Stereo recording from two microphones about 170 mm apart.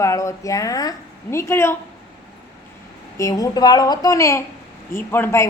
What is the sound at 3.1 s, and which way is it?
A woman's voice, 20° left (ahead or behind).